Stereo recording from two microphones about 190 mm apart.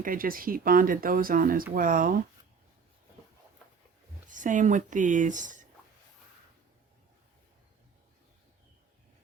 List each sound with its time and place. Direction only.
0.0 s speech: 50° right (ahead or behind)
4.3 s speech: 45° right (ahead or behind)